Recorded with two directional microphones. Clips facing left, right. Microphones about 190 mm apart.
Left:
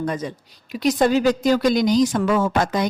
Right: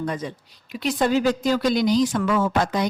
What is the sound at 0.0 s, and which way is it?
A woman's voice, 45° left (ahead or behind).